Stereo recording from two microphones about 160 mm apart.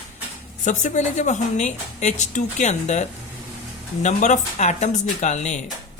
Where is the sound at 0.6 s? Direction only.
50° left (ahead or behind).